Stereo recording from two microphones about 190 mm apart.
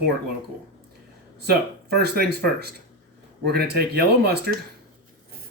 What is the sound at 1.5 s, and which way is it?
Speech, 55° right (ahead or behind).